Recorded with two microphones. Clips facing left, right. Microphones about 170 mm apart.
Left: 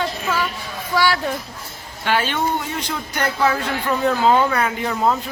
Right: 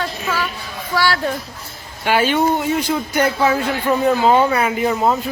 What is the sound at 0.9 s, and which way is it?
Speech, 15° left (ahead or behind).